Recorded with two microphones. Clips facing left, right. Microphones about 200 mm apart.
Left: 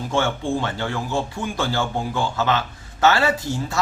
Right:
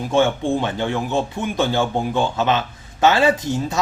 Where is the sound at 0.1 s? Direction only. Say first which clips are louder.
Right 5 dB; 20° right (ahead or behind).